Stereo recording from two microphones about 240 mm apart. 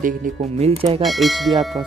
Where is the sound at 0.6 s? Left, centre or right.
Right.